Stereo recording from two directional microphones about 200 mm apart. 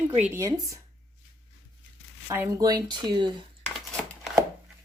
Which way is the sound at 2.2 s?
10° right (ahead or behind).